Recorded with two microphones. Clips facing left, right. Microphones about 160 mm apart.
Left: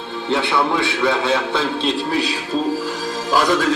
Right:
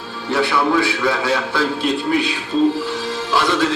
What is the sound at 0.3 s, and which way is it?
A man's voice, 20° left (ahead or behind).